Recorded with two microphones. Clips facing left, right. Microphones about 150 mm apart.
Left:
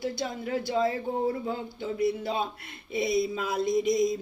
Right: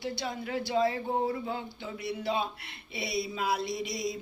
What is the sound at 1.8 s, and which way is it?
Speech, 50° left (ahead or behind).